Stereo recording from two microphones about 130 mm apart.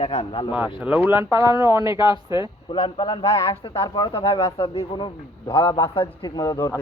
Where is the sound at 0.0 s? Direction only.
50° left (ahead or behind).